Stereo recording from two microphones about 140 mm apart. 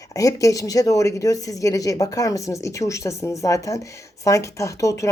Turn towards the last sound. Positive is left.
turn(degrees=20)  # may be behind; listen again after turning